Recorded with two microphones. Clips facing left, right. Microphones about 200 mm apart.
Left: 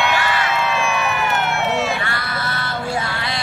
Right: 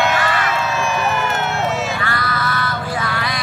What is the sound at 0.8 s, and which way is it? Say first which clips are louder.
Crowd: right 1 dB; 60° left (ahead or behind).